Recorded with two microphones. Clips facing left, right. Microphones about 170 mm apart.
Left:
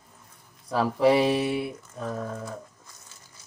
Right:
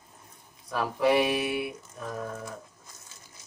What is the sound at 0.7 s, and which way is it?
Speech, 30° left (ahead or behind).